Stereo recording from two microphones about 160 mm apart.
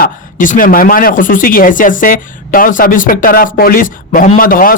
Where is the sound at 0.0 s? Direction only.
55° left (ahead or behind).